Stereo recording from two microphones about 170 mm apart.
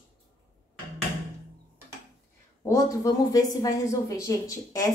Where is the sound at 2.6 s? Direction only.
20° left (ahead or behind).